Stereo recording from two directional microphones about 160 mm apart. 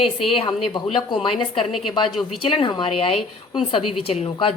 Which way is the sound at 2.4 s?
30° left (ahead or behind).